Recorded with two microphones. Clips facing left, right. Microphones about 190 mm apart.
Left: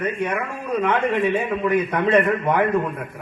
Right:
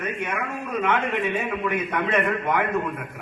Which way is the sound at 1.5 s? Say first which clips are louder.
Left 5 dB; 30° left (ahead or behind).